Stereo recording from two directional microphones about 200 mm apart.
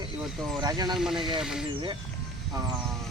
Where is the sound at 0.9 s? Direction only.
Centre (ahead or behind).